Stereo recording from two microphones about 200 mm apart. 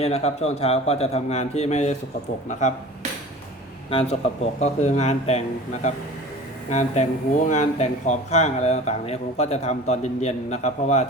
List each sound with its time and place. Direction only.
0.0 s speech: 30° left (ahead or behind)
4.6 s speech: 35° left (ahead or behind)
6.7 s speech: 35° left (ahead or behind)